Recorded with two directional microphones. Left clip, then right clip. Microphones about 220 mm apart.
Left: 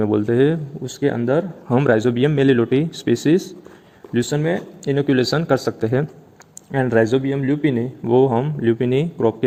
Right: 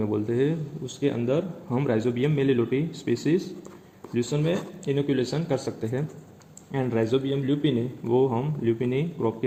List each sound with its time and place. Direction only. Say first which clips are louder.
0.0 s speech: left 9 dB; 45° left (ahead or behind)